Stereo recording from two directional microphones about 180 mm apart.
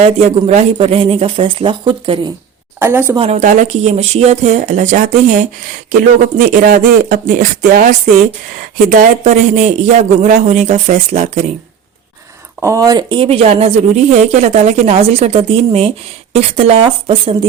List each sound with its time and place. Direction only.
0.0 s speech: 35° right (ahead or behind)
2.7 s a woman's voice: 10° right (ahead or behind)
3.2 s speech: 40° right (ahead or behind)
12.6 s speech: 15° right (ahead or behind); by 17.3 s 35° right (ahead or behind)